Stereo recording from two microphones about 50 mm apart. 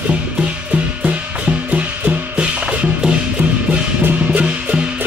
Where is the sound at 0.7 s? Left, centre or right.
Right.